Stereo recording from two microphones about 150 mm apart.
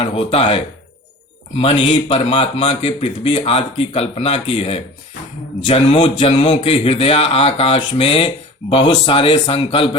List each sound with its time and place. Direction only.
0.0 s speech: 40° left (ahead or behind)